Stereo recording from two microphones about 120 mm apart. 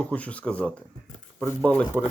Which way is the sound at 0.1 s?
10° left (ahead or behind).